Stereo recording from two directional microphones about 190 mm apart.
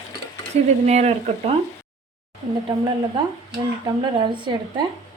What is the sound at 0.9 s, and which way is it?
Speech, 35° right (ahead or behind).